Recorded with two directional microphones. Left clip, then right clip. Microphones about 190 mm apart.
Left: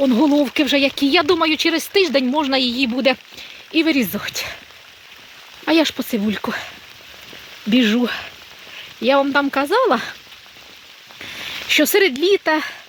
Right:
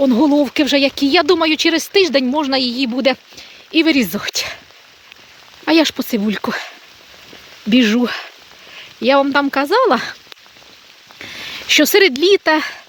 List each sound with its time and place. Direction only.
0.0 s speech: 20° right (ahead or behind)
3.7 s speech: 30° right (ahead or behind)
5.6 s speech: 20° right (ahead or behind)
7.7 s speech: 25° right (ahead or behind)
11.7 s speech: 35° right (ahead or behind)